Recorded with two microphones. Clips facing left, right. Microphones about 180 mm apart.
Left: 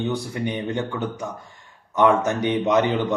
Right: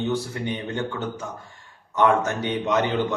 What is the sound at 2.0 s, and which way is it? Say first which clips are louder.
Speech: left 2 dB; 15° left (ahead or behind).